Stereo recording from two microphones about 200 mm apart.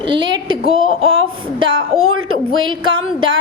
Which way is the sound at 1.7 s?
90° right.